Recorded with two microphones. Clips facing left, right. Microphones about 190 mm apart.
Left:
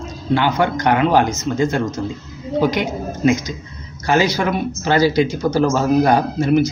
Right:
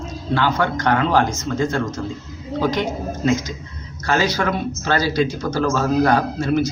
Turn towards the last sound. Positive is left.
turn(degrees=15)  # may be behind; listen again after turning